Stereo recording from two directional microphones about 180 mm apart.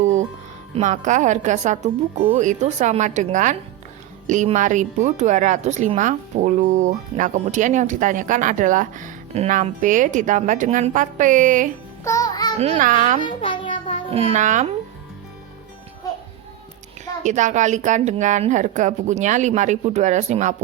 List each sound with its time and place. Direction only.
0.0 s music: 40° right (ahead or behind)
0.7 s a woman's voice: 40° right (ahead or behind)
12.0 s music: 20° left (ahead or behind)
12.5 s a woman's voice: 35° right (ahead or behind)
13.2 s music: 25° left (ahead or behind)
14.1 s a woman's voice: 35° right (ahead or behind)
17.2 s a woman's voice: 40° right (ahead or behind)